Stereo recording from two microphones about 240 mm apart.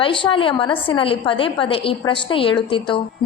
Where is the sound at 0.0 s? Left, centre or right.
Left.